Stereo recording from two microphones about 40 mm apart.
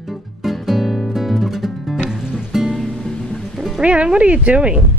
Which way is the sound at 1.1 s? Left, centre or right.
Centre.